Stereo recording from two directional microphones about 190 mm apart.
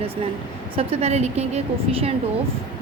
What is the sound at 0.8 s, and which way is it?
A woman's voice, 35° right (ahead or behind).